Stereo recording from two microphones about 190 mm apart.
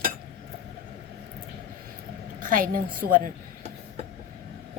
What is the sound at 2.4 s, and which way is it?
Speech, 45° right (ahead or behind).